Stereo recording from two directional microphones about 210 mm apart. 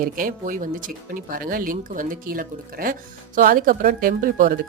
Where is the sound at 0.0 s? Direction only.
40° right (ahead or behind).